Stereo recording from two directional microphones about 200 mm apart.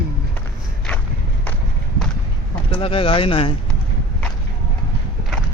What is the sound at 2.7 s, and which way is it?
Speech, 25° left (ahead or behind).